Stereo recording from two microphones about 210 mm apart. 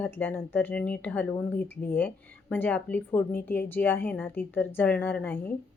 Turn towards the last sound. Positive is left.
turn(degrees=10)  # may be behind; listen again after turning